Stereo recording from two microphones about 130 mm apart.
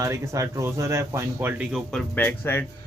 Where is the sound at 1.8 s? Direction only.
10° left (ahead or behind).